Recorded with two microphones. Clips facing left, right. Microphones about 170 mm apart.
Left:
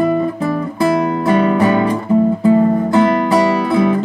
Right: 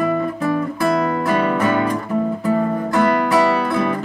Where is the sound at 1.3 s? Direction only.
25° left (ahead or behind).